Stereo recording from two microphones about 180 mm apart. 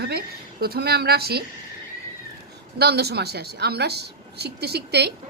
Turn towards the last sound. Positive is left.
turn(degrees=-65)  # may be behind; listen again after turning